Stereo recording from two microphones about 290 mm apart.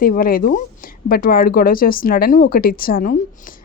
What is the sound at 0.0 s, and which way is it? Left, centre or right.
A woman's voice, left.